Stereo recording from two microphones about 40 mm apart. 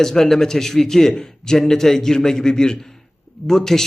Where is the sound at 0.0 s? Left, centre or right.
Centre.